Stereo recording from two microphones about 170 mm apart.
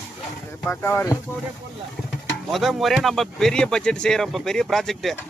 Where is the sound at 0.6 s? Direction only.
15° left (ahead or behind).